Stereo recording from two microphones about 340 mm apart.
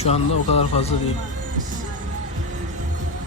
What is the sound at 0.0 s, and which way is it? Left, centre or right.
Speech, centre.